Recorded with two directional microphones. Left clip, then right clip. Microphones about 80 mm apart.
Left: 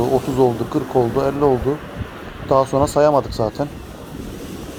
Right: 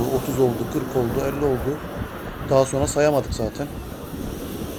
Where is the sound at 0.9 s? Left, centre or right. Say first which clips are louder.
Left 6 dB; left.